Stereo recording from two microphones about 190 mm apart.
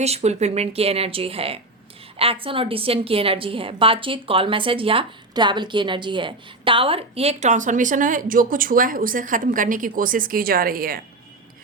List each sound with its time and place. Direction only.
0.0 s a woman's voice: 35° right (ahead or behind)